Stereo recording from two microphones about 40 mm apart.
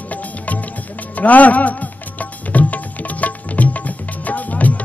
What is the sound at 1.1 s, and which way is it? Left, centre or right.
Speech, left.